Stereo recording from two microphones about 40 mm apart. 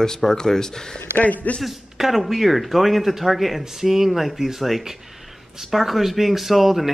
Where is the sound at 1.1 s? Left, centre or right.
Left.